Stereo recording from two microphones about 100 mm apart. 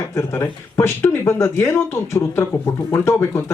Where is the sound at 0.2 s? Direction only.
25° left (ahead or behind).